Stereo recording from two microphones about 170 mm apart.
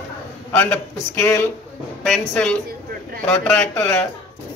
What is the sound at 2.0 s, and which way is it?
Speech, 5° left (ahead or behind).